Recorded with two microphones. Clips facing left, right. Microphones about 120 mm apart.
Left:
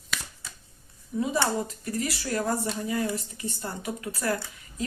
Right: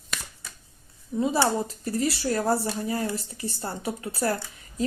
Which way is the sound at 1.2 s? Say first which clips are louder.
Right 3 dB; 30° right (ahead or behind).